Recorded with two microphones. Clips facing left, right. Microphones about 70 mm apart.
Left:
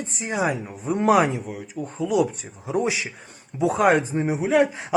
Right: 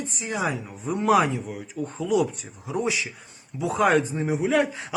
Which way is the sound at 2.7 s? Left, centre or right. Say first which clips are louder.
Left 3 dB; left.